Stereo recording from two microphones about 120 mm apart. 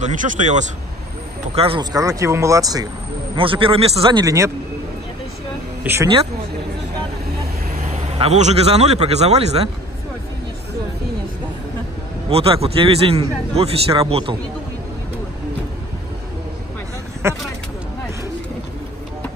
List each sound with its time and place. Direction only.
0.0 s speech: 85° right
1.5 s speech: 55° right (ahead or behind)
1.8 s speech: 30° right (ahead or behind)
3.3 s a man's voice: 45° right (ahead or behind)
4.1 s speech: 30° right (ahead or behind)
7.7 s vehicle: 90° right
8.2 s speech: 65° right (ahead or behind)
12.3 s a man's voice: 55° right (ahead or behind)
17.2 s speech: 25° right (ahead or behind)